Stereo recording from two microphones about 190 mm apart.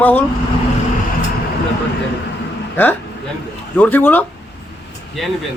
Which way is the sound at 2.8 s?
10° left (ahead or behind).